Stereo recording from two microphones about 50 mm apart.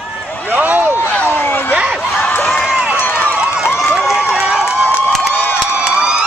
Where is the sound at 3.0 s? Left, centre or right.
Left.